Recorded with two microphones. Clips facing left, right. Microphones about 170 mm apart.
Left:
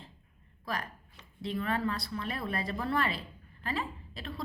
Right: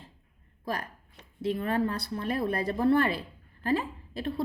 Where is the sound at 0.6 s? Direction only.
50° right (ahead or behind).